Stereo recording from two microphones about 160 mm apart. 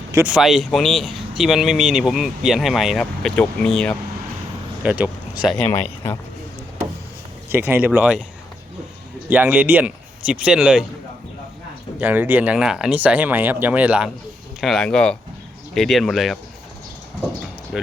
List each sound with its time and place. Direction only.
0.3 s speech: 5° right (ahead or behind)
4.8 s speech: 10° right (ahead or behind)
5.5 s speech: 10° left (ahead or behind)
7.5 s speech: 15° right (ahead or behind)
9.3 s speech: 10° right (ahead or behind)
11.9 s speech: 10° right (ahead or behind)
14.6 s speech: 5° left (ahead or behind)